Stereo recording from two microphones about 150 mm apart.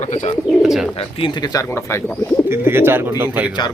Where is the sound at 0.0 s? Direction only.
50° left (ahead or behind).